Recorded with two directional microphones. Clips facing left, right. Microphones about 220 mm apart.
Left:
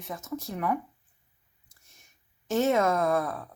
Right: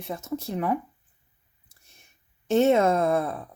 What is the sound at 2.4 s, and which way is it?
Speech, 25° right (ahead or behind).